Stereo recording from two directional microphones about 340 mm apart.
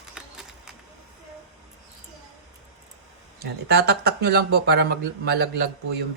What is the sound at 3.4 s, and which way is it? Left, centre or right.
Speech, right.